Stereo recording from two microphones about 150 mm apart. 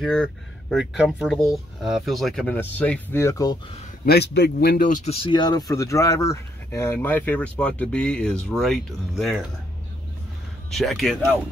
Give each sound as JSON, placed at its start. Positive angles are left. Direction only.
{"t": 0.0, "sound": "speech", "side_deg": 5}
{"t": 3.8, "sound": "a man's voice", "side_deg": 80}
{"t": 5.2, "sound": "speech", "side_deg": 30}
{"t": 10.7, "sound": "speech", "side_deg": 0}